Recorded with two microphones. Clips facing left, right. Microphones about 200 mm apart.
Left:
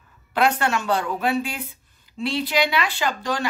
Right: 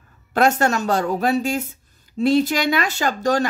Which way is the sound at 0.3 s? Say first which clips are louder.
Right 3 dB; 45° right (ahead or behind).